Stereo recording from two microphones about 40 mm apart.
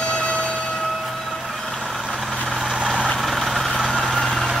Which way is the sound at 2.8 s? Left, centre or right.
Right.